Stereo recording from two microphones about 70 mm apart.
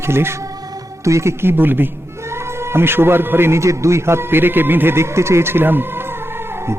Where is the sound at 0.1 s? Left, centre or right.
Right.